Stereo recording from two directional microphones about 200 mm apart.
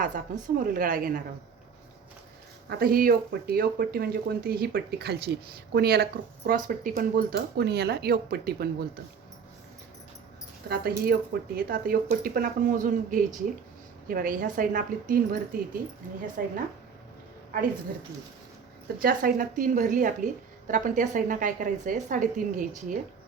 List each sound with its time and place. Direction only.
0.0 s speech: 40° right (ahead or behind)
2.6 s speech: 50° right (ahead or behind)
10.7 s speech: 50° right (ahead or behind)
18.9 s a woman's voice: 45° right (ahead or behind)